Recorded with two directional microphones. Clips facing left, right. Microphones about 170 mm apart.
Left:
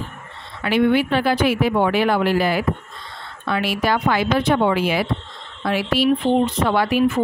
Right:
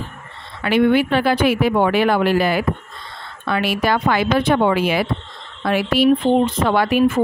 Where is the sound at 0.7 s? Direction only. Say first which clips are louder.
Right 2 dB; 60° right (ahead or behind).